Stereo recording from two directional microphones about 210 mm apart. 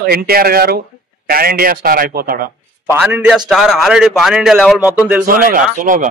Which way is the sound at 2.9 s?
10° right (ahead or behind).